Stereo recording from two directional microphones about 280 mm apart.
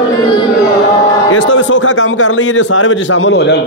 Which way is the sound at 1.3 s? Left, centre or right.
Left.